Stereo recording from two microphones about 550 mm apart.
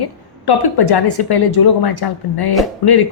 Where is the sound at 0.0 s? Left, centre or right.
Left.